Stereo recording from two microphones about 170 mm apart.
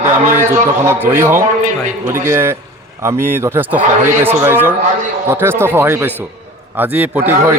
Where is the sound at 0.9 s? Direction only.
15° right (ahead or behind).